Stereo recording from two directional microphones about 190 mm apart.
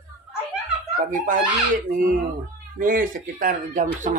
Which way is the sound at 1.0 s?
45° right (ahead or behind).